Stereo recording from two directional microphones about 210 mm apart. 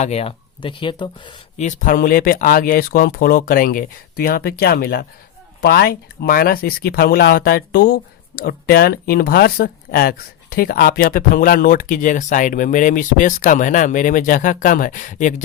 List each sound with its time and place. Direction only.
0.0 s speech: 30° left (ahead or behind)
1.6 s speech: 40° left (ahead or behind)